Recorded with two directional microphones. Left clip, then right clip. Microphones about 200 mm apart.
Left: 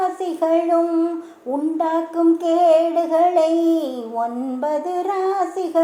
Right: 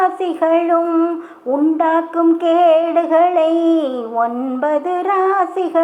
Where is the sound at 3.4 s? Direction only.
35° right (ahead or behind).